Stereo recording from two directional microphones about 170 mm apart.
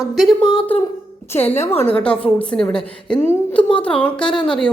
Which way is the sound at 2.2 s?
5° left (ahead or behind).